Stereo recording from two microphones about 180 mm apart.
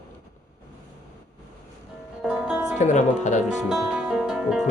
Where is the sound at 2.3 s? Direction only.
5° right (ahead or behind).